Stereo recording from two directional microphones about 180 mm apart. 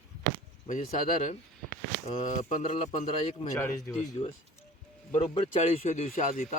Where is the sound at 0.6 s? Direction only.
45° left (ahead or behind).